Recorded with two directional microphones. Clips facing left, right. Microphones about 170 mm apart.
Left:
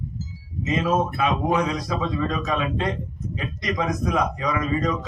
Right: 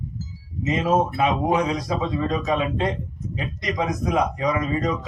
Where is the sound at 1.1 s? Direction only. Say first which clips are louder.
Right 1 dB; 20° right (ahead or behind).